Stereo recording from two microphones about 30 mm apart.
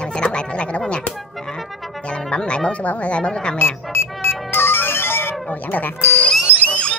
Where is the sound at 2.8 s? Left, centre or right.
Left.